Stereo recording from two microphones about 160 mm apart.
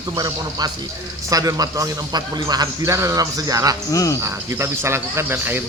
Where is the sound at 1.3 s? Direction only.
20° right (ahead or behind).